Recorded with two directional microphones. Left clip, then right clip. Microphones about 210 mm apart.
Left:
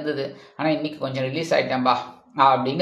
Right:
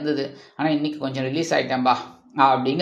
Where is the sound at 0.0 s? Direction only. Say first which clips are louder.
Right 2 dB; 25° right (ahead or behind).